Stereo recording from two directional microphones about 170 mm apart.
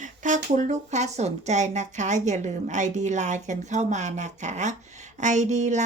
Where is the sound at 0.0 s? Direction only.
45° right (ahead or behind).